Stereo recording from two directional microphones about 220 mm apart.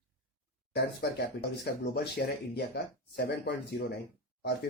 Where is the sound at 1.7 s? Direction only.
45° left (ahead or behind).